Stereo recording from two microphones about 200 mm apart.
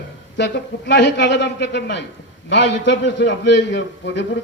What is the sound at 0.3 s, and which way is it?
A man's voice, 60° left (ahead or behind).